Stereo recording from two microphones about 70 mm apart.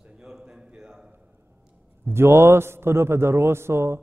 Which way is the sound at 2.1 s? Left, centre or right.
Right.